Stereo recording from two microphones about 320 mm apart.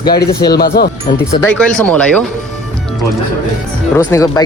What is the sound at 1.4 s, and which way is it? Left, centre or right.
Speech, centre.